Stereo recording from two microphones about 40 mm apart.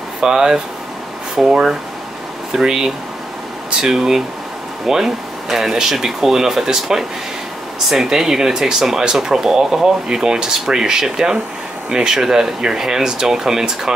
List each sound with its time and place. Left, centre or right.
0.2 s speech: centre